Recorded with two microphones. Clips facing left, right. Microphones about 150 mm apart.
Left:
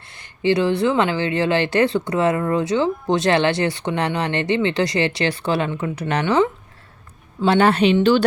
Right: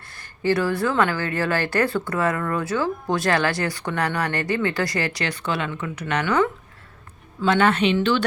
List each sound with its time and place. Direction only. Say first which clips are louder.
0.1 s a woman's voice: left 3 dB; 20° left (ahead or behind)